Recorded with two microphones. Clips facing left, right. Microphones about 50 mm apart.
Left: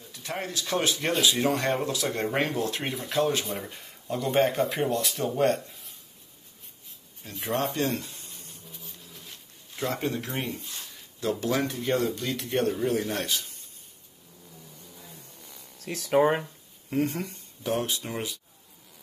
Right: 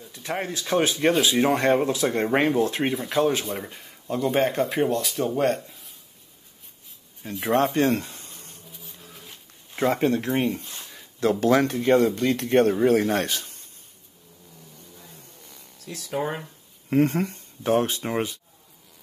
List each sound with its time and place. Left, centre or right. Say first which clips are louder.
0.1 s speech: right 4 dB; centre
2.9 s speech: right 4 dB; centre
7.2 s speech: right 8 dB; centre
7.7 s a sound: right 7 dB; right
8.6 s a sound: right 1 dB; centre
9.8 s speech: right 8 dB; right
11.1 s speech: right 7 dB; right
12.2 s a man's voice: right 8 dB; right
13.0 s speech: right 6 dB; right
15.4 s a sound: right 1 dB; centre
15.8 s speech: left 5 dB; left
16.9 s speech: right 7 dB; right